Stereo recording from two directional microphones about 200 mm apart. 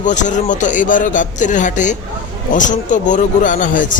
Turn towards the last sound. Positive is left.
turn(degrees=40)  # may be behind; listen again after turning